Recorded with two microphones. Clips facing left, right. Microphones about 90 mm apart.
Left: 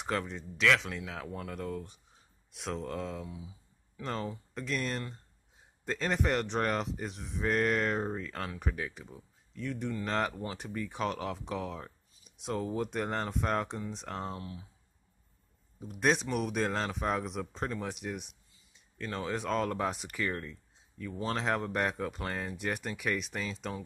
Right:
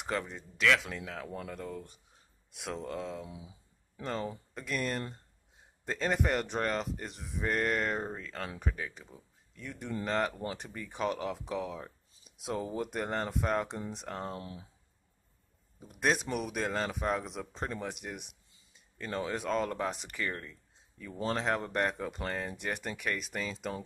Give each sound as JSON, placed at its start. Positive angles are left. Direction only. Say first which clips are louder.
{"t": 0.0, "sound": "speech", "louder": "left 1 dB", "side_deg": 0}
{"t": 3.3, "sound": "speech", "louder": "left 2 dB", "side_deg": -20}
{"t": 4.0, "sound": "speech", "louder": "even", "side_deg": 0}
{"t": 14.3, "sound": "speech", "louder": "even", "side_deg": -30}
{"t": 15.8, "sound": "speech", "louder": "left 2 dB", "side_deg": 0}